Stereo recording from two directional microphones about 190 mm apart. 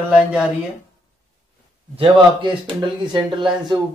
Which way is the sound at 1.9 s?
25° right (ahead or behind).